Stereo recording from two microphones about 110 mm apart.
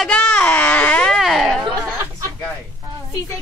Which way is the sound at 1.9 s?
20° right (ahead or behind).